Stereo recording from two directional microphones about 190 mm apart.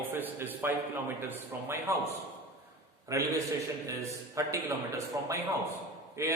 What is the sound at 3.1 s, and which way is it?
A man's voice, 15° right (ahead or behind).